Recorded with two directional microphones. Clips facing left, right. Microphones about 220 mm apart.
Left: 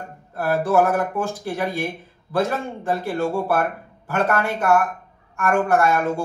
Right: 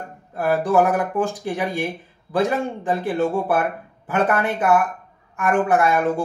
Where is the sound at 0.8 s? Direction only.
15° right (ahead or behind).